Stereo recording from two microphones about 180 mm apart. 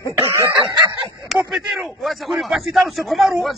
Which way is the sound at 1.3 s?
Centre (ahead or behind).